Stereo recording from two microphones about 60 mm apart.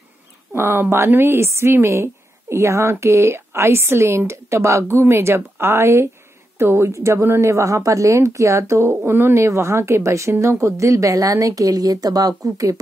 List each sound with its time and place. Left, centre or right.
0.5 s a woman's voice: right